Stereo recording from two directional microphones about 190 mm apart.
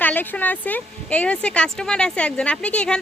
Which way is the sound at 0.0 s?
10° left (ahead or behind).